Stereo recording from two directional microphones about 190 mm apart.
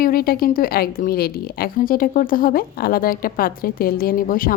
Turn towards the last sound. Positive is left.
turn(degrees=50)  # may be behind; listen again after turning